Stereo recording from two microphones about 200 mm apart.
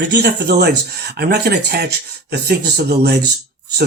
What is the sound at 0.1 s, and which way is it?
Speech, 55° right (ahead or behind).